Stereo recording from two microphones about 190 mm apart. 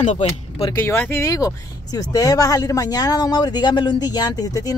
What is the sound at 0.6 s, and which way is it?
Speech, 15° left (ahead or behind).